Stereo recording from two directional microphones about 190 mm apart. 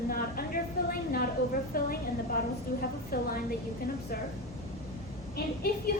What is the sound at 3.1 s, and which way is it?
Speech, 50° left (ahead or behind).